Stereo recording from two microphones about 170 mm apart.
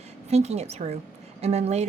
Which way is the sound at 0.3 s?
40° right (ahead or behind).